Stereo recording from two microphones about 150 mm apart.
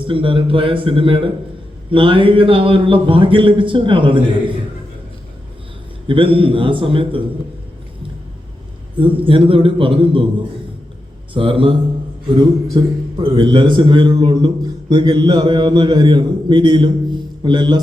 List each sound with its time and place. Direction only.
0.0 s a man's voice: 35° right (ahead or behind)
6.1 s a man's voice: 35° right (ahead or behind)
9.0 s a man's voice: 35° right (ahead or behind)
11.3 s a man's voice: 35° right (ahead or behind)
12.7 s a man's voice: 30° right (ahead or behind)